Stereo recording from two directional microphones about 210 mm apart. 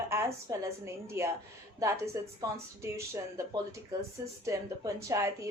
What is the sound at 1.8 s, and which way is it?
Speech, 15° right (ahead or behind).